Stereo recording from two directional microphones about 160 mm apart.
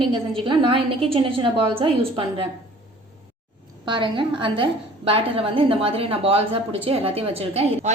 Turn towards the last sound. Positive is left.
turn(degrees=-40)  # may be behind; listen again after turning